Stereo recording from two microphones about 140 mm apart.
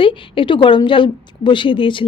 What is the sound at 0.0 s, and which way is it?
A woman's voice, 35° left (ahead or behind).